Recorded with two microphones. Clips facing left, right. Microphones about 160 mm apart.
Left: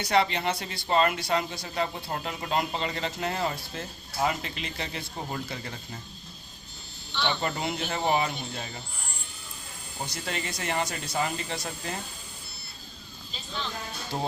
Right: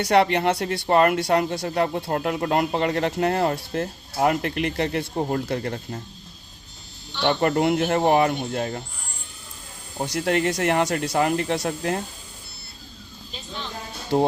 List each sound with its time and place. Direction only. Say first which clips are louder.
0.0 s speech: right 7 dB; 65° right (ahead or behind)
7.3 s speech: right 11 dB; 55° right (ahead or behind)
10.0 s speech: right 12 dB; 70° right (ahead or behind)
14.1 s speech: right 12 dB; 60° right (ahead or behind)